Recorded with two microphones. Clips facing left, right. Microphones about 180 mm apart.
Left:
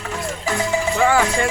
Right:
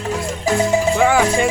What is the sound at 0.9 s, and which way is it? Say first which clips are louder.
Music: left 1 dB; 15° right (ahead or behind).